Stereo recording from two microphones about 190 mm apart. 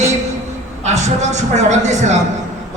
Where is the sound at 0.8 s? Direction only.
35° right (ahead or behind).